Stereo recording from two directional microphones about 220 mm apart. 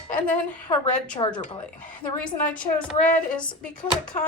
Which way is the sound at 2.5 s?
5° left (ahead or behind).